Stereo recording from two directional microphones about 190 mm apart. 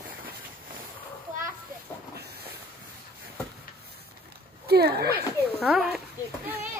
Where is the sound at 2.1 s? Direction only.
55° right (ahead or behind).